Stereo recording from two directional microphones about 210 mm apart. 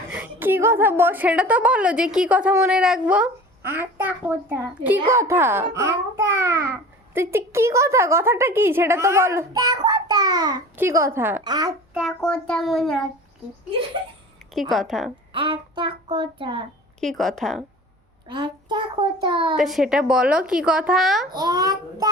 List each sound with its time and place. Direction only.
0.1 s a woman's voice: 10° right (ahead or behind)
11.9 s speech: centre (ahead or behind)
14.5 s speech: centre (ahead or behind)
15.3 s a child's voice: 25° right (ahead or behind)
17.0 s speech: centre (ahead or behind)
18.3 s a child's voice: 20° right (ahead or behind)
19.5 s speech: centre (ahead or behind)
21.3 s a child's voice: 20° right (ahead or behind)